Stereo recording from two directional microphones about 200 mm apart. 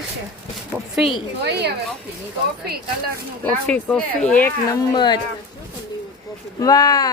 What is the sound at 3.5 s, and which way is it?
Speech, 5° left (ahead or behind).